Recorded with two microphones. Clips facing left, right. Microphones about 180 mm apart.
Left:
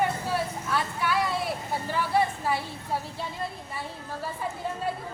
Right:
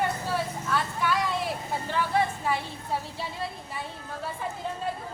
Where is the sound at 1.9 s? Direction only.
5° left (ahead or behind).